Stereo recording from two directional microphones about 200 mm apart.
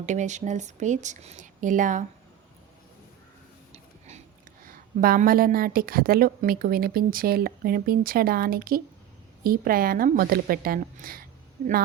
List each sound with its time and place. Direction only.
0.0 s speech: 35° right (ahead or behind)
3.7 s a sound: 35° right (ahead or behind)
4.6 s a woman's voice: 45° right (ahead or behind)